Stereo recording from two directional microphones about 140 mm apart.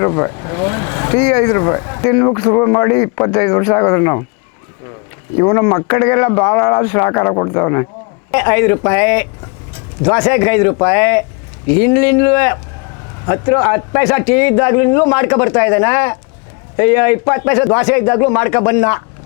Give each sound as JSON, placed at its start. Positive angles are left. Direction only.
{"t": 0.0, "sound": "a man's voice", "side_deg": 20}
{"t": 5.4, "sound": "a man's voice", "side_deg": 20}